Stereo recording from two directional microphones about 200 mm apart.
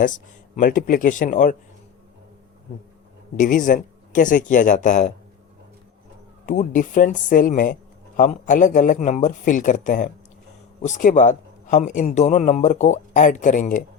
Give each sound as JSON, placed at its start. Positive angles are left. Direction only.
{"t": 0.5, "sound": "speech", "side_deg": 40}
{"t": 3.3, "sound": "speech", "side_deg": 40}
{"t": 6.4, "sound": "speech", "side_deg": 40}